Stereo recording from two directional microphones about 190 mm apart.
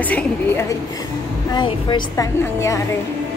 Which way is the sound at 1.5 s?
25° left (ahead or behind).